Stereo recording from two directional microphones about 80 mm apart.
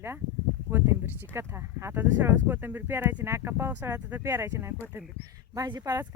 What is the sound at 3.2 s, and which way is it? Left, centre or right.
Speech, right.